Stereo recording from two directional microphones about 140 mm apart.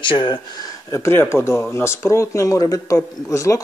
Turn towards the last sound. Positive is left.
turn(degrees=20)  # may be behind; listen again after turning